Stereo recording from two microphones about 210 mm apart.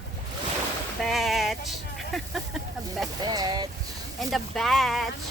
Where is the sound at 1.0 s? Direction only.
Centre (ahead or behind).